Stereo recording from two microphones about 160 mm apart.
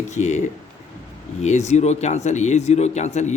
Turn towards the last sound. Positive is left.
turn(degrees=45)  # may be behind; listen again after turning